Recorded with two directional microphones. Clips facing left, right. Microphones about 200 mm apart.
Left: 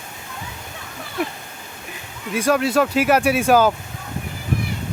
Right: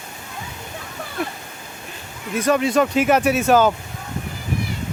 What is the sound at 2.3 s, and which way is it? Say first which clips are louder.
Speech: even; 5° left (ahead or behind).